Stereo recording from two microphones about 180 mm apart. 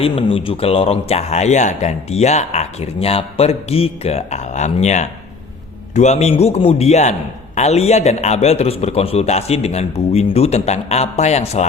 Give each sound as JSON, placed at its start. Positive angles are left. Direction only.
{"t": 0.0, "sound": "a man's voice", "side_deg": 30}